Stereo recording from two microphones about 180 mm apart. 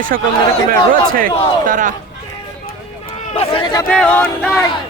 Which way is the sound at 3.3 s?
25° left (ahead or behind).